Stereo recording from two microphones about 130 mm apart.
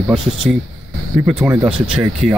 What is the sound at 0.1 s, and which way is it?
Speech, 5° right (ahead or behind).